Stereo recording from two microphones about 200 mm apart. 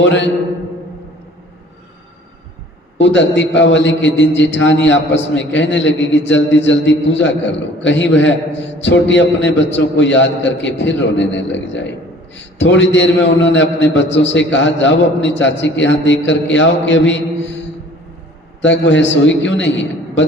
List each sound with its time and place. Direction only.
0.0 s a man's voice: 60° left (ahead or behind)
3.0 s a man's voice: 65° left (ahead or behind)
18.6 s a man's voice: 65° left (ahead or behind)